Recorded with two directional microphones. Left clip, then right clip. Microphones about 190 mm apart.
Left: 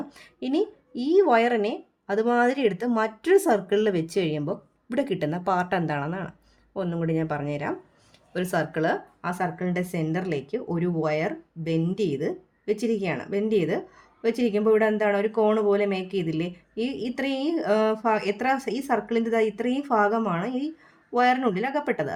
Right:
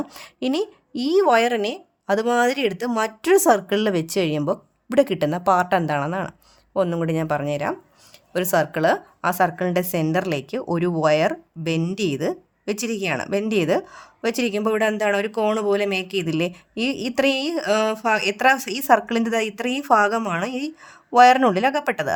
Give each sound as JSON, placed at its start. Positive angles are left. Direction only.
{"t": 0.1, "sound": "a woman's voice", "side_deg": -35}
{"t": 8.3, "sound": "a woman's voice", "side_deg": -35}